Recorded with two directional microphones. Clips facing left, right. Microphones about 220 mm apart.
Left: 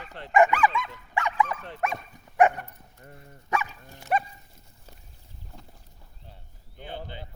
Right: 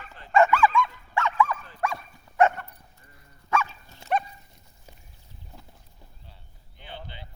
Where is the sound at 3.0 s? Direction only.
55° left (ahead or behind).